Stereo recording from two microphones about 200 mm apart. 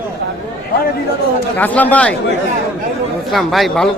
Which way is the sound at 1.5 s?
10° left (ahead or behind).